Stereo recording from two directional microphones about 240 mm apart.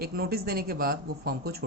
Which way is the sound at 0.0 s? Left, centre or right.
Right.